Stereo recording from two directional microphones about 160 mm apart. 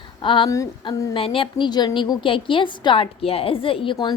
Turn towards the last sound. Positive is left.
turn(degrees=35)  # may be behind; listen again after turning